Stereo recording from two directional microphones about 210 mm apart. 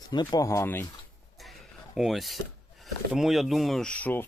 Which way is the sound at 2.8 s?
Centre (ahead or behind).